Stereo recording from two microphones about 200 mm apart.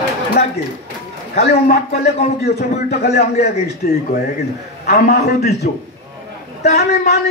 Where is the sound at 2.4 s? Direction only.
55° left (ahead or behind).